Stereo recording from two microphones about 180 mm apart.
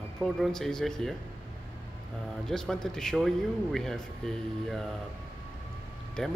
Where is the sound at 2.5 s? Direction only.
5° left (ahead or behind).